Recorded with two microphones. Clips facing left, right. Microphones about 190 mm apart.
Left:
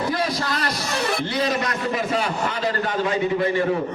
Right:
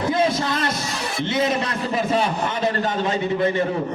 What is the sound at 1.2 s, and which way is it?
A man's voice, 25° right (ahead or behind).